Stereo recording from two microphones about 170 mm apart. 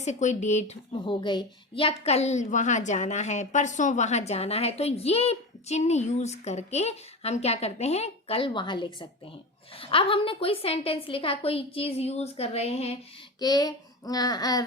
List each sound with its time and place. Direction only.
0.0 s a woman's voice: 45° left (ahead or behind)
1.0 s a woman's voice: 25° left (ahead or behind)
13.4 s speech: 25° left (ahead or behind)